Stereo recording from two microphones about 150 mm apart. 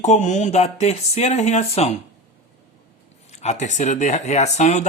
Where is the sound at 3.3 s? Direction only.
50° left (ahead or behind).